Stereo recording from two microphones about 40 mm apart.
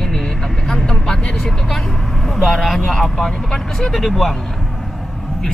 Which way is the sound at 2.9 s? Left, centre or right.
Centre.